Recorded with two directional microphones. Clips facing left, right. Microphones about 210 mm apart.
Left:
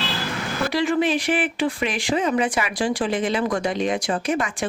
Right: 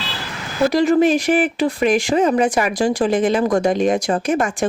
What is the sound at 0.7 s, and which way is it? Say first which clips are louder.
Speech: right 6 dB; 40° right (ahead or behind).